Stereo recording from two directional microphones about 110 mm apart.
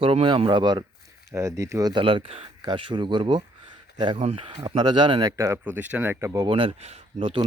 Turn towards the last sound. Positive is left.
turn(degrees=-55)  # may be behind; listen again after turning